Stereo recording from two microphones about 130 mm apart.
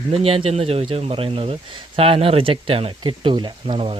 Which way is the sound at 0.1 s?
45° right (ahead or behind).